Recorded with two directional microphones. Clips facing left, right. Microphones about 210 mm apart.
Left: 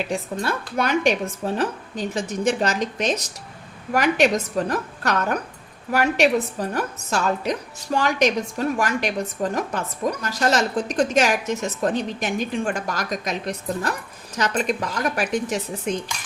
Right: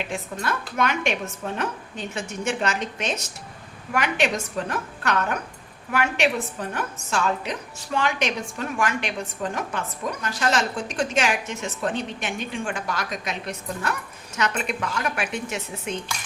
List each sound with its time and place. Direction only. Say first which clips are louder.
0.3 s a woman's voice: right 1 dB; 35° left (ahead or behind)